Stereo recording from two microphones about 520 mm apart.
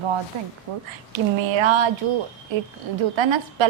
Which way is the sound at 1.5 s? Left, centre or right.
Right.